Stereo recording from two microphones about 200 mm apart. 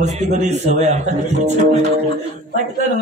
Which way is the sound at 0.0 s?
35° right (ahead or behind).